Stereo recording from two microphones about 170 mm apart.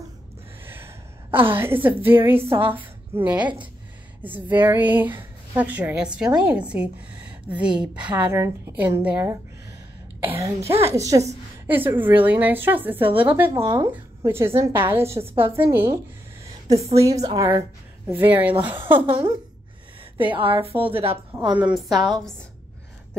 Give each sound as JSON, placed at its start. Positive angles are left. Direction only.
{"t": 0.7, "sound": "a woman's voice", "side_deg": -15}
{"t": 13.5, "sound": "a woman's voice", "side_deg": -20}
{"t": 18.9, "sound": "a woman's voice", "side_deg": -30}
{"t": 21.5, "sound": "a woman's voice", "side_deg": -5}